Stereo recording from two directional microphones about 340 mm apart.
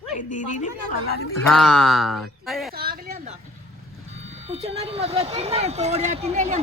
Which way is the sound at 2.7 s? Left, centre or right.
Right.